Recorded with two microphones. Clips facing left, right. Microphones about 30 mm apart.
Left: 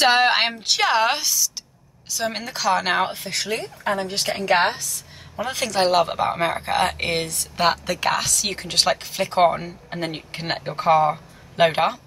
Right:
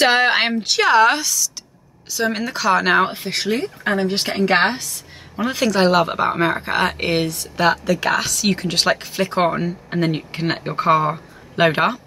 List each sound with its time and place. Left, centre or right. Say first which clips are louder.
0.1 s a woman's voice: right 2 dB; centre
2.1 s speech: right 5 dB; centre
3.2 s a woman's voice: right 5 dB; right
5.3 s speech: right 5 dB; centre
7.5 s a woman's voice: right 3 dB; centre
8.2 s speech: right 5 dB; centre